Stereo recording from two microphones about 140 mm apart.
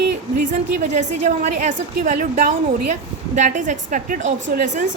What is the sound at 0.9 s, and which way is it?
Speech, 55° right (ahead or behind).